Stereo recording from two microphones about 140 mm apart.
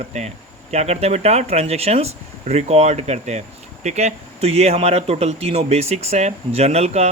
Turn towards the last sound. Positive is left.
turn(degrees=-50)  # may be behind; listen again after turning